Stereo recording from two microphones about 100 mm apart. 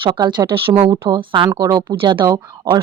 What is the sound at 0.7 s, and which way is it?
Speech, 45° right (ahead or behind).